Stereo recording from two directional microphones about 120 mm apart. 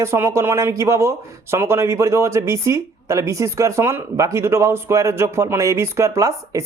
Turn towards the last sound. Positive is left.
turn(degrees=-25)  # may be behind; listen again after turning